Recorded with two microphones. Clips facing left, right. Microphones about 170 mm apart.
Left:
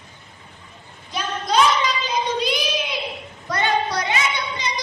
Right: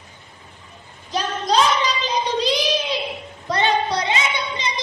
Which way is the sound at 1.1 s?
35° right (ahead or behind).